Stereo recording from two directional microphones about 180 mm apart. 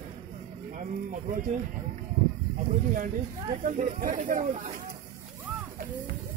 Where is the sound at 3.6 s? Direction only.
45° right (ahead or behind).